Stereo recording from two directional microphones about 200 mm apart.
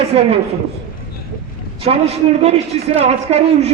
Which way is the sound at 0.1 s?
30° right (ahead or behind).